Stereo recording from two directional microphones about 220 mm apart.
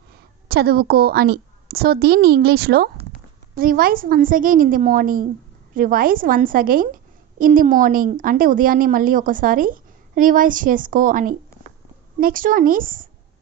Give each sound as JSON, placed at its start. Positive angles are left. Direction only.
{"t": 0.5, "sound": "a woman's voice", "side_deg": -45}